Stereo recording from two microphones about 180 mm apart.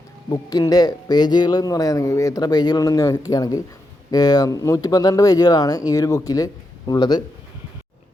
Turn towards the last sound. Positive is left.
turn(degrees=20)  # may be behind; listen again after turning